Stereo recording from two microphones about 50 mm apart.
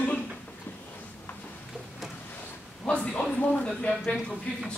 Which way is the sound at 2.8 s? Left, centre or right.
Left.